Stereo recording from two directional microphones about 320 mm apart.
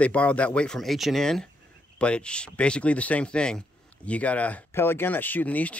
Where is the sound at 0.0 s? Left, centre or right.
Centre.